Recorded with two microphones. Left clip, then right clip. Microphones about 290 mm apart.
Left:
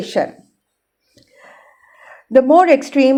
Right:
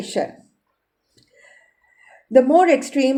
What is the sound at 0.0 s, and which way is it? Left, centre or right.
Speech, centre.